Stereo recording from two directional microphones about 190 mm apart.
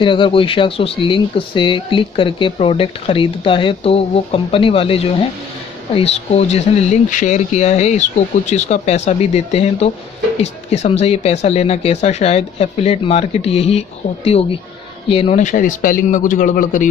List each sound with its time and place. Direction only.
0.0 s speech: 25° left (ahead or behind); by 16.8 s 45° left (ahead or behind)